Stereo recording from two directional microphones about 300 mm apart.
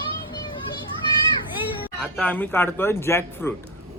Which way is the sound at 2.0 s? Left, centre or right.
Centre.